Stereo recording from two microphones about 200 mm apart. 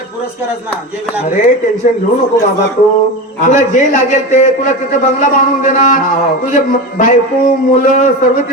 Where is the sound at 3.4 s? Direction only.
40° left (ahead or behind).